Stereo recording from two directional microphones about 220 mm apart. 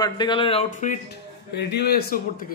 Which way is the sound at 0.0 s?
20° left (ahead or behind).